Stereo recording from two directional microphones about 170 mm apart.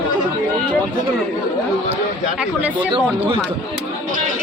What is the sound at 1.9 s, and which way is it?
Speech, 10° right (ahead or behind).